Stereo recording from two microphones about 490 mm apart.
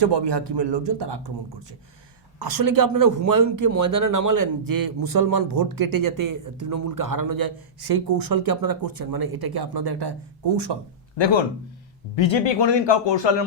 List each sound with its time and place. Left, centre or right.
0.0 s speech: right
2.4 s speech: right
11.2 s speech: left